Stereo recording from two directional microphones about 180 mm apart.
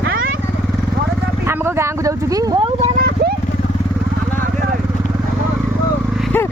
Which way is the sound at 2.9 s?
60° right (ahead or behind).